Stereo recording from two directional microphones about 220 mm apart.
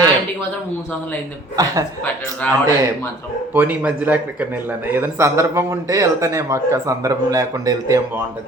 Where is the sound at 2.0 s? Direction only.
5° left (ahead or behind).